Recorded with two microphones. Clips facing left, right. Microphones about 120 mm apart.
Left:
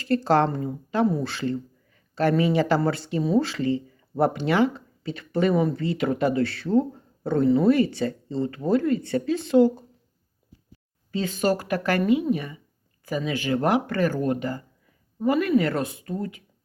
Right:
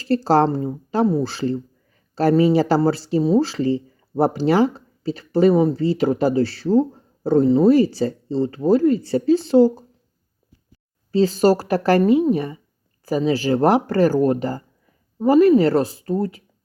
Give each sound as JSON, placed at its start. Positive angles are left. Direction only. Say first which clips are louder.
{"t": 0.0, "sound": "speech", "louder": "right 4 dB", "side_deg": -35}
{"t": 11.1, "sound": "speech", "louder": "right 8 dB", "side_deg": -35}